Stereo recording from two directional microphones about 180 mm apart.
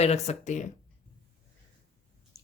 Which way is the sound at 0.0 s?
40° left (ahead or behind).